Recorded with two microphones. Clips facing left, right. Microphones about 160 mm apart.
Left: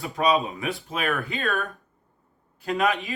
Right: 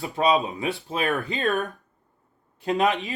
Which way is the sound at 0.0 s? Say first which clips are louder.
Right 1 dB; 20° right (ahead or behind).